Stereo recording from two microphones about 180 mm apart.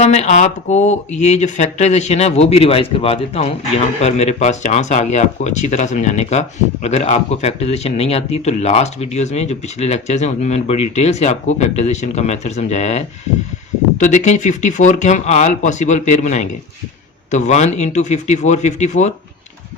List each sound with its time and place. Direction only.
0.0 s speech: 40° left (ahead or behind)